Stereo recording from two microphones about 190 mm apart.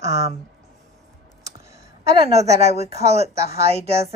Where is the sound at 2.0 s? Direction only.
35° right (ahead or behind).